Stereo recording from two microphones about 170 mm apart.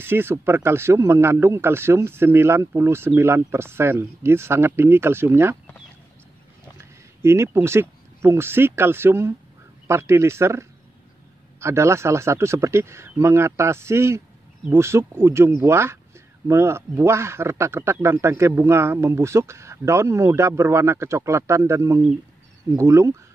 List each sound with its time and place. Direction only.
0.0 s speech: 15° right (ahead or behind)
6.8 s speech: 15° right (ahead or behind)